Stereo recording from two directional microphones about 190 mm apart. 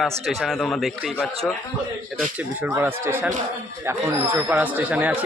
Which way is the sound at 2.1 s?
10° right (ahead or behind).